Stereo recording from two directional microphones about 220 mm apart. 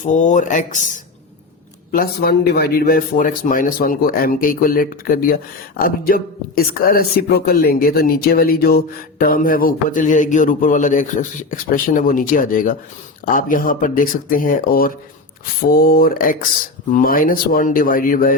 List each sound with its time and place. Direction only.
0.0 s speech: 35° left (ahead or behind)
1.9 s speech: 45° left (ahead or behind)